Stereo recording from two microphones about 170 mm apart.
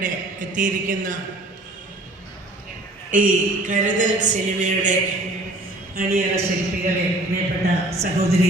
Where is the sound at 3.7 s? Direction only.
50° right (ahead or behind).